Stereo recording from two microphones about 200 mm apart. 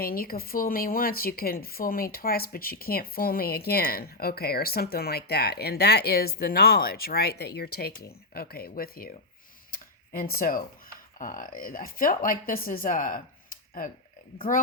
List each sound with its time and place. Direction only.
0.0 s speech: 45° left (ahead or behind)
9.7 s a sound: 45° left (ahead or behind)
10.3 s speech: 45° left (ahead or behind)